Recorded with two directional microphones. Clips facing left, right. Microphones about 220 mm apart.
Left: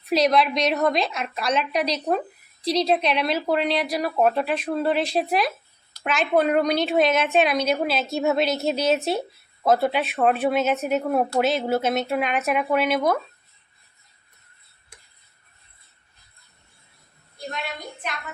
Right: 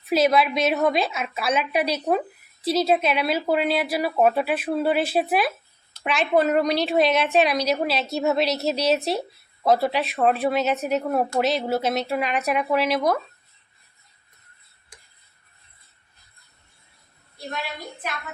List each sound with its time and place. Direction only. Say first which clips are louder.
0.0 s a woman's voice: even; 5° right (ahead or behind)